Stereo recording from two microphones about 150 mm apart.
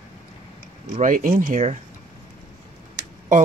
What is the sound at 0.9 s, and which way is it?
Speech, 60° right (ahead or behind).